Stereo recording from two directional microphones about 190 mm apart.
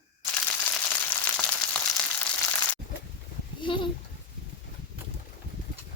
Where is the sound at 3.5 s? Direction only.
25° left (ahead or behind).